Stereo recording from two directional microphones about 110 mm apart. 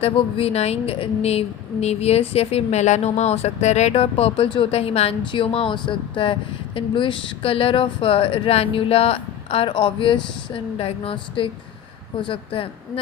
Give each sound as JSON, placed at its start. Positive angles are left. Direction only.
{"t": 0.0, "sound": "a woman's voice", "side_deg": 65}